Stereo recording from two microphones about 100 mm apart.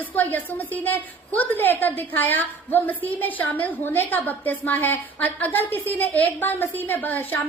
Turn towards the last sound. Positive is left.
turn(degrees=20)  # may be behind; listen again after turning